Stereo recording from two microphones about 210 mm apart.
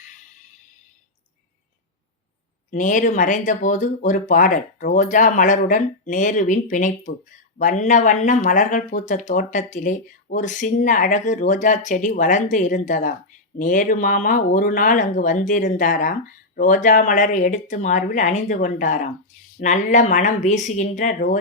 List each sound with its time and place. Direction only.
2.6 s speech: 35° left (ahead or behind)